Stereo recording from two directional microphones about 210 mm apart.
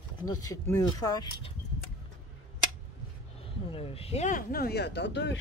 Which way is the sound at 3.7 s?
25° left (ahead or behind).